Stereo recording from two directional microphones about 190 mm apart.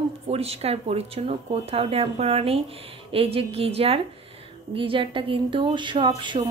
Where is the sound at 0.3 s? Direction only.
30° right (ahead or behind).